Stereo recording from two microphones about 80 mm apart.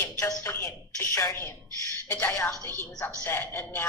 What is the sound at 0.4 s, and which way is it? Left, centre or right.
A woman's voice, left.